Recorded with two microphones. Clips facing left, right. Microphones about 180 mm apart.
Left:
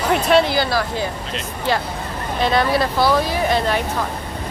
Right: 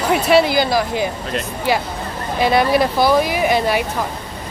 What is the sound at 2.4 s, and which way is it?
Speech, 10° right (ahead or behind).